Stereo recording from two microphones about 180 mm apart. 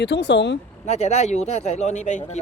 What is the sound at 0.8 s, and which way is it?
Speech, 35° left (ahead or behind).